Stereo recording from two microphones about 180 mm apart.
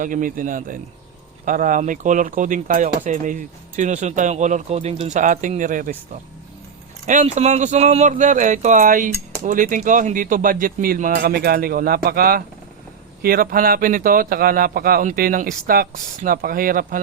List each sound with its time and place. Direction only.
0.0 s speech: 50° right (ahead or behind)
7.0 s speech: 40° right (ahead or behind)
11.2 s speech: 60° right (ahead or behind)